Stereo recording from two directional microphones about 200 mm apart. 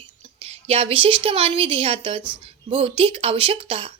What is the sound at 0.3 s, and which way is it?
A woman's voice, 30° right (ahead or behind).